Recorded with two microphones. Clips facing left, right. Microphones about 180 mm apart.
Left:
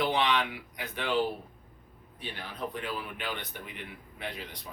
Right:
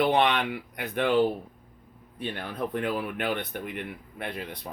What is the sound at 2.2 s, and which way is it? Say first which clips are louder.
Speech: right 6 dB; 55° right (ahead or behind).